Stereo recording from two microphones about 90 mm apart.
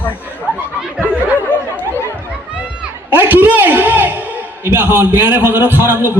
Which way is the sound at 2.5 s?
15° right (ahead or behind).